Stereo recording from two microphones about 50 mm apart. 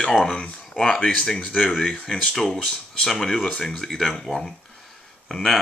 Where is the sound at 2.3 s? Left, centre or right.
Centre.